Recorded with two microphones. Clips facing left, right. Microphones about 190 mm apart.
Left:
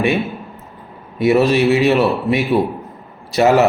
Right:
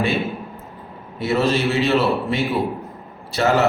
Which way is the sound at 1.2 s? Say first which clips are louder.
Left 6 dB; 15° left (ahead or behind).